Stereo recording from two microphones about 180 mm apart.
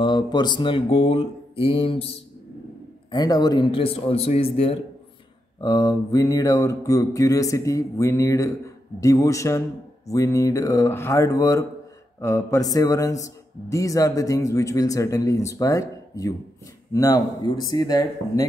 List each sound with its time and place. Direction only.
0.0 s mantra: 25° left (ahead or behind)
3.1 s mantra: 20° left (ahead or behind)
5.6 s a man's voice: 20° left (ahead or behind)